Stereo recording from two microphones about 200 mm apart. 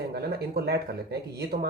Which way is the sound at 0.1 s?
50° right (ahead or behind).